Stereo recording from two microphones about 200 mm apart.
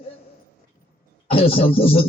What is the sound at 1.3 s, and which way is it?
Speech, 30° left (ahead or behind).